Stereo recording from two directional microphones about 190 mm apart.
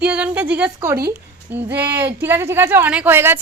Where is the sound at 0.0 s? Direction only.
5° right (ahead or behind).